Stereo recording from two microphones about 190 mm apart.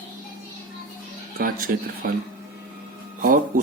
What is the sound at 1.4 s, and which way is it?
Speech, 50° right (ahead or behind).